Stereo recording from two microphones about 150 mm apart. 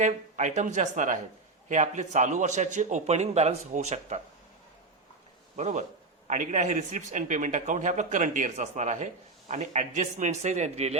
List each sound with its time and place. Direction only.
0.0 s a man's voice: 50° right (ahead or behind)
5.5 s a man's voice: 50° right (ahead or behind)